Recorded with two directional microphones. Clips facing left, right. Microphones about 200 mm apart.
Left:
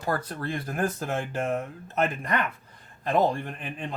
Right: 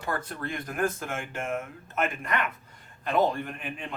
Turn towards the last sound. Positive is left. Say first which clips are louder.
# left 1 dB
turn(degrees=35)  # may be behind; listen again after turning